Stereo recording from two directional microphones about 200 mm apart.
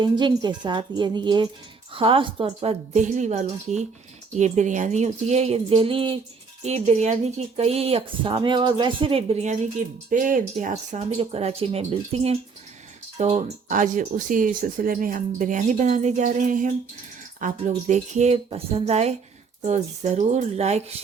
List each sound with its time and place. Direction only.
0.0 s a woman's voice: 20° right (ahead or behind)